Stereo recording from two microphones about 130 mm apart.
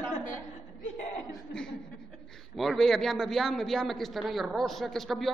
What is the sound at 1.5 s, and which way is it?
A man's voice, 5° left (ahead or behind).